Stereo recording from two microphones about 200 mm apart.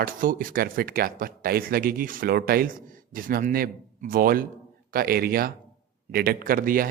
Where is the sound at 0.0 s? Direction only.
45° right (ahead or behind).